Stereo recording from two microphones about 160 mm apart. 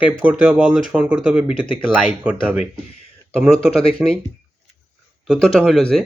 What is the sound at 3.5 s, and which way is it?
Speech, 35° left (ahead or behind).